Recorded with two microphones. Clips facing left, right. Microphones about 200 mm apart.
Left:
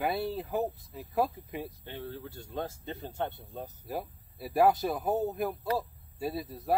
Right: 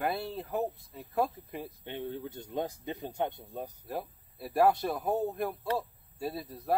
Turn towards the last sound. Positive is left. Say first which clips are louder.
# left 1 dB
turn(degrees=0)  # may be behind; listen again after turning